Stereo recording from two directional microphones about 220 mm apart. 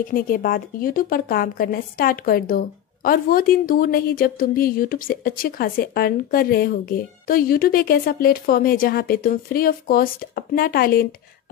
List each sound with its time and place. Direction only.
0.1 s a woman's voice: 40° left (ahead or behind)